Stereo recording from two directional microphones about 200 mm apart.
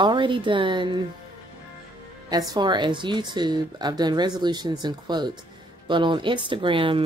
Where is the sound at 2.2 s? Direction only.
20° right (ahead or behind).